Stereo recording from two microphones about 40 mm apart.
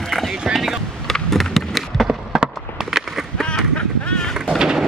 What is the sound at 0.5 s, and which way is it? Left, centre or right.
Vehicle, centre.